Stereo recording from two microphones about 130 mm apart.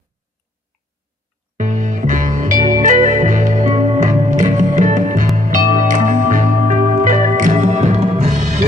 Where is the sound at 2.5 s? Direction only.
80° right.